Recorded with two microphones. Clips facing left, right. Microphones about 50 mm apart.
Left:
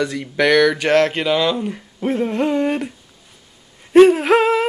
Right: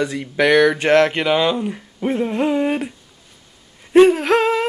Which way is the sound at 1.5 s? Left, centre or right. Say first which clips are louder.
Right 1 dB; centre.